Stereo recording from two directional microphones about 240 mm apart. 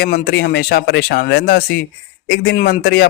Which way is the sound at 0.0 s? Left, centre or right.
Left.